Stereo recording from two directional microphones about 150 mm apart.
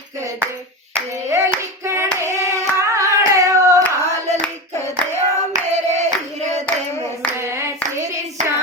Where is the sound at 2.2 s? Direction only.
20° right (ahead or behind).